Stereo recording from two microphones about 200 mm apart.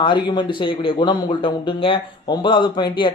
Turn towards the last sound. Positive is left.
turn(degrees=25)  # may be behind; listen again after turning